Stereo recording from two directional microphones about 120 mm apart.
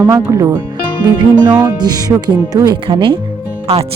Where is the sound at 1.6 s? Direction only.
35° right (ahead or behind).